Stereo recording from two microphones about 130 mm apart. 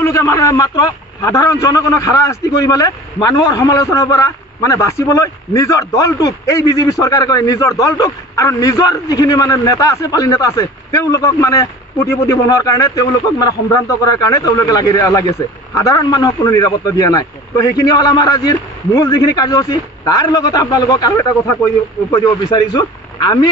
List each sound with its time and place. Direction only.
0.0 s a man's voice: 25° left (ahead or behind)
22.1 s a man's voice: 35° left (ahead or behind)